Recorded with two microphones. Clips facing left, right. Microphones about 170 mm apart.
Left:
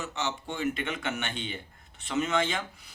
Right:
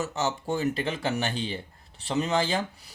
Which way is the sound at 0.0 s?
40° right (ahead or behind).